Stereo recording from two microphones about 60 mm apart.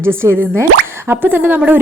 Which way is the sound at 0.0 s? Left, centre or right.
Right.